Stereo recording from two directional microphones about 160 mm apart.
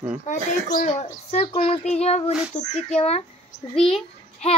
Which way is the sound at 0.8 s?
40° left (ahead or behind).